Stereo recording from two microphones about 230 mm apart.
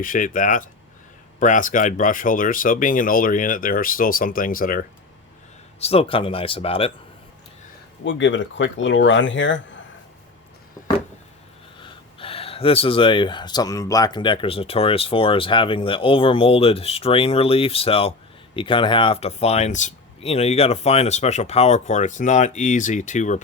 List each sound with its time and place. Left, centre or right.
0.0 s speech: left
5.8 s speech: left
8.0 s speech: left
11.8 s speech: left